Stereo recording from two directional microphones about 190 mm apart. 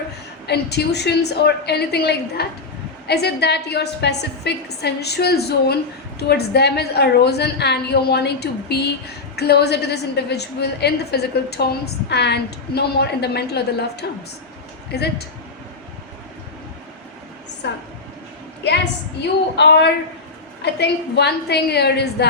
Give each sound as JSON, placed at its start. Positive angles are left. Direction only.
{"t": 0.4, "sound": "a woman's voice", "side_deg": 60}
{"t": 17.6, "sound": "a woman's voice", "side_deg": 65}
{"t": 19.6, "sound": "a woman's voice", "side_deg": 65}